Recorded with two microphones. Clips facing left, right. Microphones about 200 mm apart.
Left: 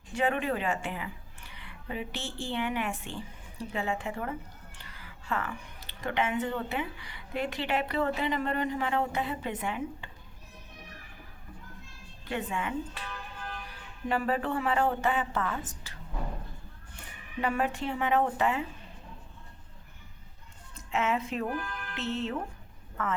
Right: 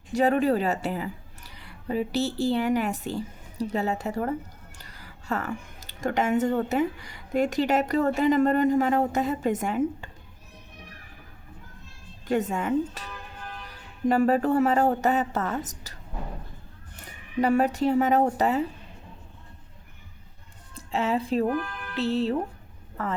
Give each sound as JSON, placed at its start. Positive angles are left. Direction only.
{"t": 0.1, "sound": "speech", "side_deg": -40}
{"t": 12.3, "sound": "a woman's voice", "side_deg": -40}
{"t": 14.1, "sound": "a woman's voice", "side_deg": -40}
{"t": 17.4, "sound": "a woman's voice", "side_deg": -40}
{"t": 20.7, "sound": "a woman's voice", "side_deg": -35}